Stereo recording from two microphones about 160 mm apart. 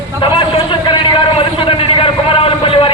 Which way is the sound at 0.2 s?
30° left (ahead or behind).